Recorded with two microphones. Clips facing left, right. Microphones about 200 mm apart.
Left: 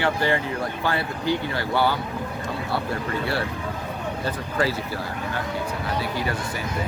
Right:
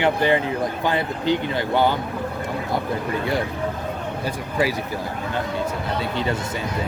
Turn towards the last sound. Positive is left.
turn(degrees=-25)  # may be behind; listen again after turning